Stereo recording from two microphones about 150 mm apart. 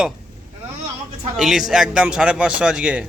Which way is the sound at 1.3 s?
5° right (ahead or behind).